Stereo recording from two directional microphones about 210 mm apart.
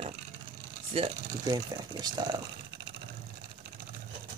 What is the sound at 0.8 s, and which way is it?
Speech, 25° right (ahead or behind).